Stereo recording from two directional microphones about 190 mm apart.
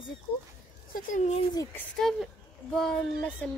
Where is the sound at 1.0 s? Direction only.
40° left (ahead or behind).